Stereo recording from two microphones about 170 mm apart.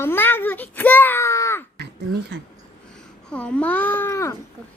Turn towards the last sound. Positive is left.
turn(degrees=15)  # may be behind; listen again after turning